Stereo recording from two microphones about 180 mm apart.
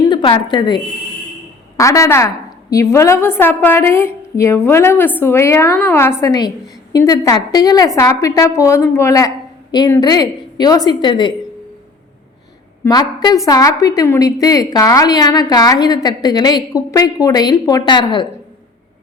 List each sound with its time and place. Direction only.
0.0 s a woman's voice: 25° left (ahead or behind)
12.8 s a woman's voice: 20° left (ahead or behind)